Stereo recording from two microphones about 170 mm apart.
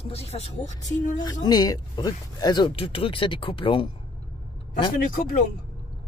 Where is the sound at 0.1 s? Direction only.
40° left (ahead or behind).